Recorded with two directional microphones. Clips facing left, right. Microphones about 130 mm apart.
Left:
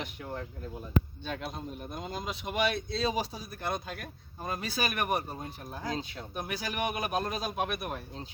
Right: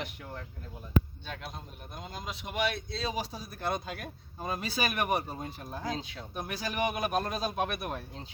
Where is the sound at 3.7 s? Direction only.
5° right (ahead or behind).